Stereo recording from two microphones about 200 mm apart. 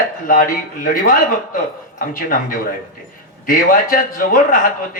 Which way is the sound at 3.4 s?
45° left (ahead or behind).